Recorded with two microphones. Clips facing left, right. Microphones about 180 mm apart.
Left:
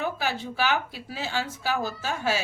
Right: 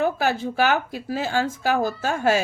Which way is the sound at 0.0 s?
50° right (ahead or behind).